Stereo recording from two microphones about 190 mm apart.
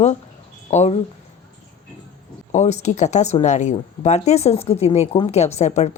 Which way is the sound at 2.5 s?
35° left (ahead or behind).